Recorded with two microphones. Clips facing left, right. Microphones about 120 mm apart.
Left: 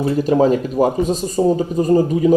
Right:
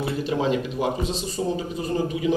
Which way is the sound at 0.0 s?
45° left (ahead or behind).